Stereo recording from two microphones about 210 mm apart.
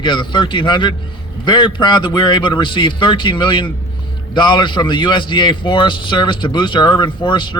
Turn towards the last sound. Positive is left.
turn(degrees=20)  # may be behind; listen again after turning